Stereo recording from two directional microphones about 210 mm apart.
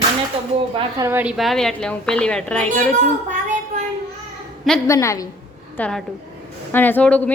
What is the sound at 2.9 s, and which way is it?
Speech, 35° right (ahead or behind).